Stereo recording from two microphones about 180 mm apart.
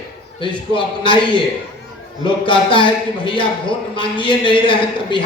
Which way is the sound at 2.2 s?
25° left (ahead or behind).